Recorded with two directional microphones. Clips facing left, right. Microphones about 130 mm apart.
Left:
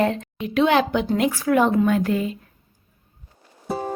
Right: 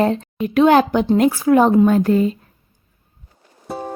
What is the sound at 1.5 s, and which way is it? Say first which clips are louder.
Speech: right 5 dB; 30° right (ahead or behind).